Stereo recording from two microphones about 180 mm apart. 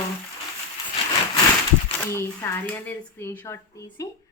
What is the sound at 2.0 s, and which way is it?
A woman's voice, 15° left (ahead or behind).